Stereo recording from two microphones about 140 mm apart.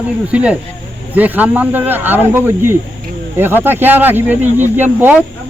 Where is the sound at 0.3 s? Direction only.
10° right (ahead or behind).